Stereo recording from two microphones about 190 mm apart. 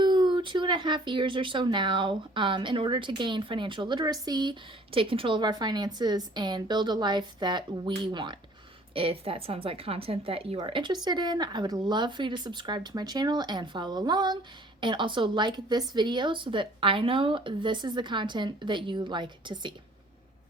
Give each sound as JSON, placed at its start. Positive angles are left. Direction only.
{"t": 0.0, "sound": "speech", "side_deg": -25}